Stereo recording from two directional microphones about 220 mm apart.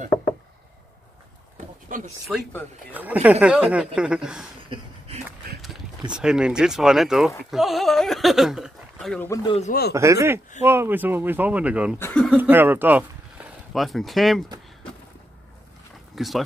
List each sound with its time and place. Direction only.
2.3 s speech: centre (ahead or behind)
4.6 s a sound: 25° right (ahead or behind)
6.1 s speech: 5° right (ahead or behind)
9.3 s speech: 15° left (ahead or behind)
9.6 s speech: 40° left (ahead or behind)
9.9 s speech: 15° right (ahead or behind); by 12.4 s 5° left (ahead or behind)
12.4 s speech: 10° right (ahead or behind)
16.2 s speech: centre (ahead or behind)